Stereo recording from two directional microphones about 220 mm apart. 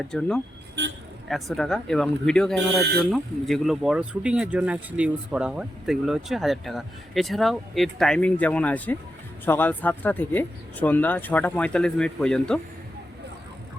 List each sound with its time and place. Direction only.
0.0 s speech: 5° left (ahead or behind)
0.8 s speech: 50° right (ahead or behind)
1.3 s speech: centre (ahead or behind)